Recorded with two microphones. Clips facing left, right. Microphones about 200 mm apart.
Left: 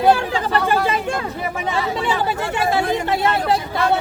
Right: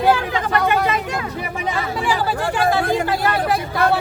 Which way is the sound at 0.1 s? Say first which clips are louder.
Left 1 dB; 30° left (ahead or behind).